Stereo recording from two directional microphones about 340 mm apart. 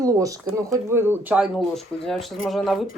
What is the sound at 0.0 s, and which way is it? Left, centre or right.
Speech, centre.